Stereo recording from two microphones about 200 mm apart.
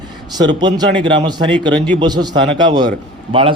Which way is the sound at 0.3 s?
20° right (ahead or behind).